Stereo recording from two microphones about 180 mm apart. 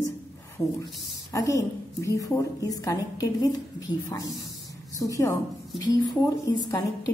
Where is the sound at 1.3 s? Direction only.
20° left (ahead or behind).